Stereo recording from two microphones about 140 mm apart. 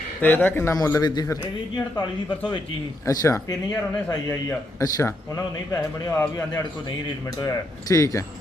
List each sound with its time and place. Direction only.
0.2 s a man's voice: 15° left (ahead or behind)